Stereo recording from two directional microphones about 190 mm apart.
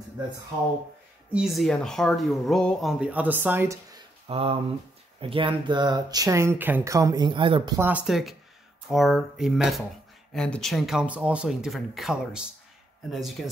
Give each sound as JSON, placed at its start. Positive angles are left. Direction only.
{"t": 1.3, "sound": "speech", "side_deg": 0}
{"t": 4.3, "sound": "speech", "side_deg": -30}